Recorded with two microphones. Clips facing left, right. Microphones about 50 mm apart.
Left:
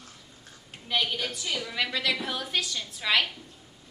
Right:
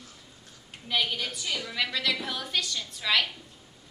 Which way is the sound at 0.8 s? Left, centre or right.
Centre.